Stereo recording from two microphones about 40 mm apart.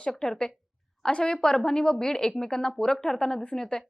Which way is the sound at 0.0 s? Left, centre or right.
Centre.